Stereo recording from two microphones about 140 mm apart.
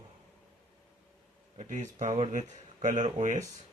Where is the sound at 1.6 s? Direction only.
60° right (ahead or behind).